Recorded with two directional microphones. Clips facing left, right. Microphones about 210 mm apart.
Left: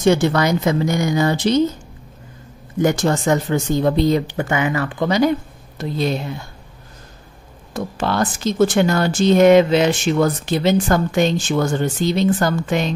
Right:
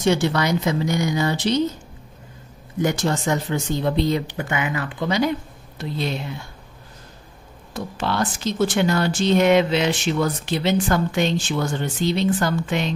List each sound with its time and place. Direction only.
0.0 s speech: 50° left (ahead or behind)
2.8 s speech: 50° left (ahead or behind)
7.7 s speech: 45° left (ahead or behind)